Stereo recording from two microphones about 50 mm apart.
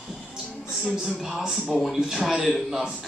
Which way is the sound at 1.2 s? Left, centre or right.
Centre.